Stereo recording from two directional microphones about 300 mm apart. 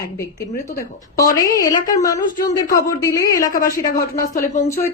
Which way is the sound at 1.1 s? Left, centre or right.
Centre.